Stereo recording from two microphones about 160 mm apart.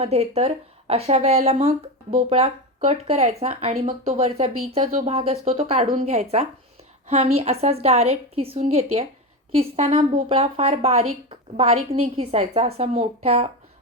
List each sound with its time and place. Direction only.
0.0 s a woman's voice: 40° right (ahead or behind)